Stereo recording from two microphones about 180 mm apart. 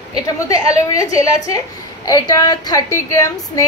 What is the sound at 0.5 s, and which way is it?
A woman's voice, 20° left (ahead or behind).